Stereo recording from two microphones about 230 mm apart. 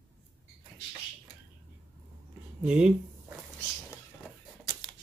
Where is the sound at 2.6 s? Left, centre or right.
Centre.